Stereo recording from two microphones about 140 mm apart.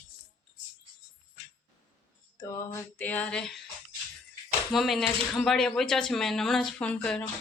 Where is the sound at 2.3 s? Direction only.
25° left (ahead or behind); by 3.6 s 5° left (ahead or behind).